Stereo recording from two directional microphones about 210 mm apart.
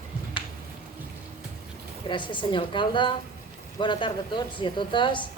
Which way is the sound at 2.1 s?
20° left (ahead or behind).